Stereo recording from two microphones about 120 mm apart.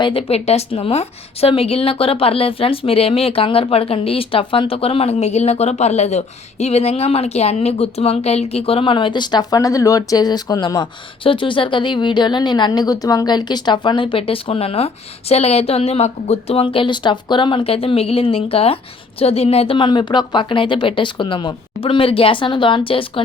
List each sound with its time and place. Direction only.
0.0 s a woman's voice: 50° left (ahead or behind)